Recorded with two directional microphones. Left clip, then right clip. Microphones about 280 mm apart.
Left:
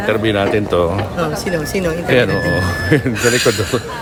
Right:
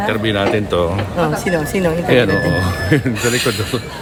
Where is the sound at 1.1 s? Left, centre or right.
Right.